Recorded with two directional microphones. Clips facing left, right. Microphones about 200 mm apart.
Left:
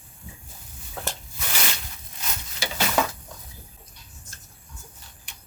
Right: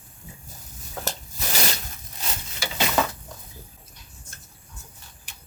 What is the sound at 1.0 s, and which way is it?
Rub, 40° right (ahead or behind).